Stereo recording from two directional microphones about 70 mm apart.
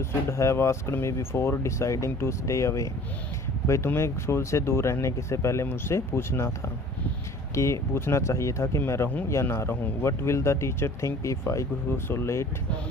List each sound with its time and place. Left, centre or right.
0.0 s speech: left
3.8 s speech: left
7.5 s speech: left